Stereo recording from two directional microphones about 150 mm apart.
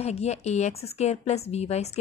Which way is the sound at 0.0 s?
45° left (ahead or behind).